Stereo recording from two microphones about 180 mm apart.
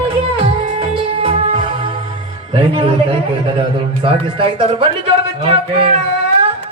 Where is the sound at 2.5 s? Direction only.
30° right (ahead or behind).